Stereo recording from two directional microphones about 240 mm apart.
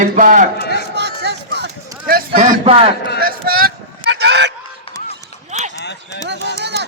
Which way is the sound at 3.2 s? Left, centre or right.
Right.